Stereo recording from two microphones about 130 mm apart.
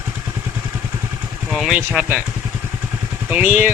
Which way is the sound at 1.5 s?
Centre (ahead or behind).